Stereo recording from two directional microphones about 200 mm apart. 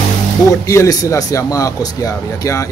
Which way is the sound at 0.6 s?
15° left (ahead or behind).